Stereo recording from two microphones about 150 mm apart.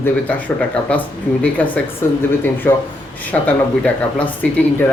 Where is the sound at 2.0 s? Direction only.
15° left (ahead or behind).